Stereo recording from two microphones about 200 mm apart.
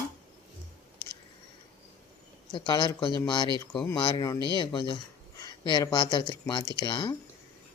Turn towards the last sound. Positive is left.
turn(degrees=25)  # may be behind; listen again after turning